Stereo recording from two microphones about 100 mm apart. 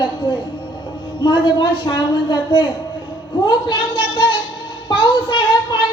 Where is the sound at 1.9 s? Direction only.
45° left (ahead or behind).